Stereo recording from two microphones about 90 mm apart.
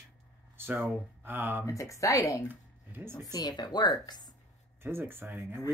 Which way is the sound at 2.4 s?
25° right (ahead or behind).